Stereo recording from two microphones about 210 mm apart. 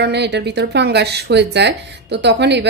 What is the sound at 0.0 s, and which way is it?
Speech, 55° right (ahead or behind).